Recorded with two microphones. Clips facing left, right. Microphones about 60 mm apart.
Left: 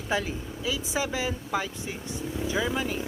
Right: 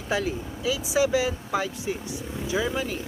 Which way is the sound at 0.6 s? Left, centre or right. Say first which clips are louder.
Right 6 dB; centre.